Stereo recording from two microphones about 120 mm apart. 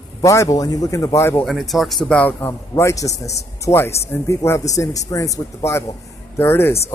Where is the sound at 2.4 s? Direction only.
25° left (ahead or behind).